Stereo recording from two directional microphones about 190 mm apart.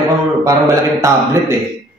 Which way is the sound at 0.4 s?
15° right (ahead or behind).